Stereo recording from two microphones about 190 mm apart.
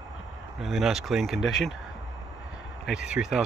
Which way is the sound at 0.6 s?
Centre (ahead or behind).